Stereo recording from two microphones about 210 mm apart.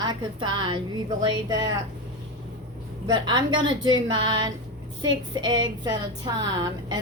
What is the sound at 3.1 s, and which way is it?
A woman's voice, 20° right (ahead or behind).